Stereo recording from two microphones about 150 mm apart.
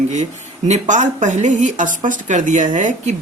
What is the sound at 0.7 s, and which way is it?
Speech, 55° right (ahead or behind).